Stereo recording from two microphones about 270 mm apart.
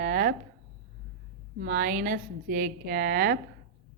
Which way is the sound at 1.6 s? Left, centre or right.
Right.